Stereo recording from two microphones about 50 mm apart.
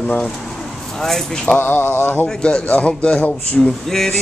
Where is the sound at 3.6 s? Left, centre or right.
Centre.